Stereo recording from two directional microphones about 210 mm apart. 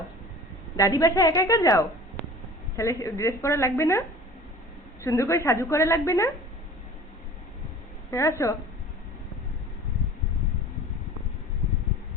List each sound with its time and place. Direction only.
0.8 s a woman's voice: 20° left (ahead or behind)
5.0 s a woman's voice: 10° left (ahead or behind)
8.1 s a woman's voice: 10° left (ahead or behind)